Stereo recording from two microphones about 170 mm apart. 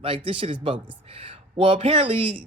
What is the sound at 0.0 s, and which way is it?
Speech, 30° right (ahead or behind).